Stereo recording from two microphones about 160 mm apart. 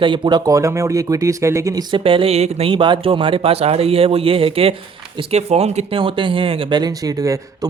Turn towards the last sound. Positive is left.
turn(degrees=-20)  # may be behind; listen again after turning